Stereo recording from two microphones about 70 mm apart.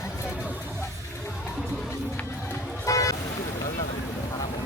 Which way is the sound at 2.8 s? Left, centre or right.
Left.